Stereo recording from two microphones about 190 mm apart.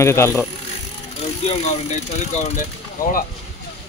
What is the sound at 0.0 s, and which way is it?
Speech, 15° left (ahead or behind).